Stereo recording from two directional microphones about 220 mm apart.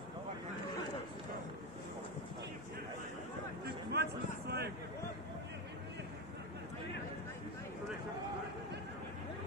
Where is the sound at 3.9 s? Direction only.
45° right (ahead or behind).